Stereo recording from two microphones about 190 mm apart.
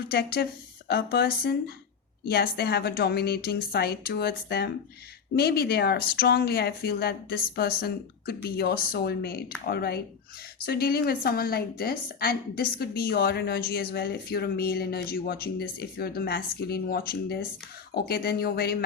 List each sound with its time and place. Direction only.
0.1 s a woman's voice: 55° left (ahead or behind)